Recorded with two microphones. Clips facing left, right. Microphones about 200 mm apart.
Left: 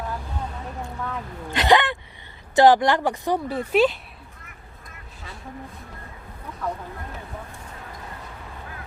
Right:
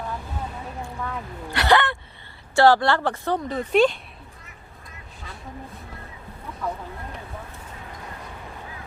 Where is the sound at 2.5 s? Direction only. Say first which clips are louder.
Left 1 dB; 15° left (ahead or behind).